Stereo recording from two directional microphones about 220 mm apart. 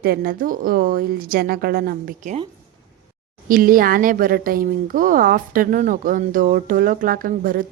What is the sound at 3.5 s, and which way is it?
Speech, 40° right (ahead or behind).